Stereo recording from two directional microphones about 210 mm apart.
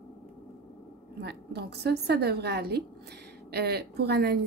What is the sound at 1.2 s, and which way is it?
A woman's voice, 50° right (ahead or behind).